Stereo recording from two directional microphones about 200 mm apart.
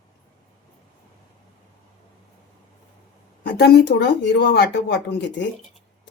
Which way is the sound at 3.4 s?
55° left (ahead or behind).